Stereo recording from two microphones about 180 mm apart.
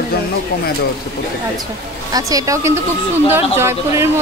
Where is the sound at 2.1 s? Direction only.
20° right (ahead or behind).